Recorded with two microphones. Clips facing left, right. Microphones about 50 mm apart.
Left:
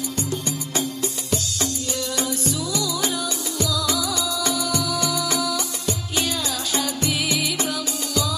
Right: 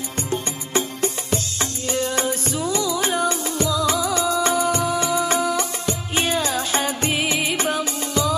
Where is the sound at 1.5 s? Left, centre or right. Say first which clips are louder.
Right 2 dB; right.